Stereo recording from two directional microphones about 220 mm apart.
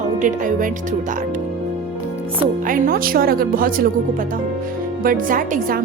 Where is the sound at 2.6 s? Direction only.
40° right (ahead or behind).